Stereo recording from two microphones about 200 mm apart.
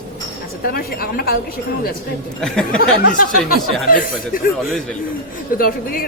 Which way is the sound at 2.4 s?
5° left (ahead or behind).